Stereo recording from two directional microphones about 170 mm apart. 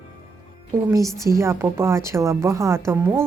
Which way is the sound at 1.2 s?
15° right (ahead or behind).